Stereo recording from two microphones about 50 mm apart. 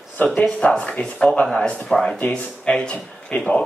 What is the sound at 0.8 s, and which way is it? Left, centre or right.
Speech, left.